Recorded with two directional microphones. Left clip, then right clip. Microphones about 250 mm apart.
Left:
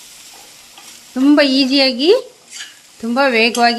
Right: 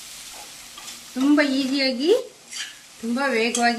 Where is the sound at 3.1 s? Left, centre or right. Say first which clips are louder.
Left 9 dB; left.